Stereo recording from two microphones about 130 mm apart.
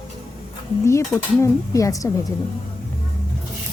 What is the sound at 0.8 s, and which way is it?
Speech, 20° left (ahead or behind).